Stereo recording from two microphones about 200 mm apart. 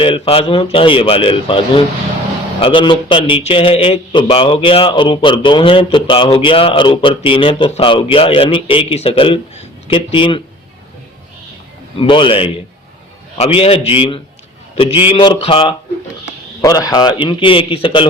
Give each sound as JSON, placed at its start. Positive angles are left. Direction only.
{"t": 0.0, "sound": "a man's voice", "side_deg": 25}
{"t": 11.9, "sound": "a man's voice", "side_deg": 25}